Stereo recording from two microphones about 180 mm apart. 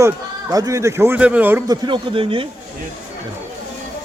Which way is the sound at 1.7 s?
25° right (ahead or behind).